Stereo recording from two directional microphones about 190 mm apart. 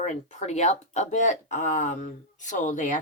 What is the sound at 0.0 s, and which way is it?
Speech, 40° left (ahead or behind).